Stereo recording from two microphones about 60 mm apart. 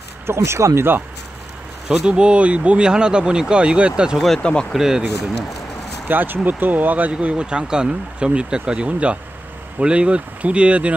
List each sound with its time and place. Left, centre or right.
0.3 s speech: right
1.9 s speech: centre
4.4 s speech: centre
4.7 s speech: centre
6.0 s speech: right